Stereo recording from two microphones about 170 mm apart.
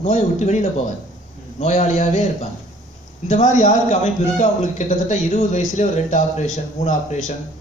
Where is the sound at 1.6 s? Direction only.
40° left (ahead or behind).